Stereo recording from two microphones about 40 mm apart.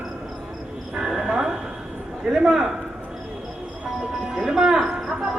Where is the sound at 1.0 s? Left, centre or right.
Centre.